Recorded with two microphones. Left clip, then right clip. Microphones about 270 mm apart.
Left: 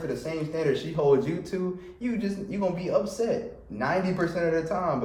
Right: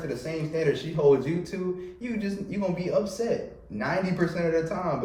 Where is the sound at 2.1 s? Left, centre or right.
Centre.